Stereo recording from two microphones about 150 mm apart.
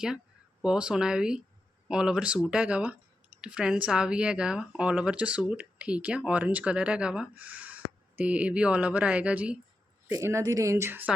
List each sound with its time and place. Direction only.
0.6 s speech: 5° right (ahead or behind)